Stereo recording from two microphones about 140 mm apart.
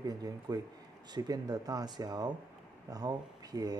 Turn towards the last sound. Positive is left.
turn(degrees=-25)  # may be behind; listen again after turning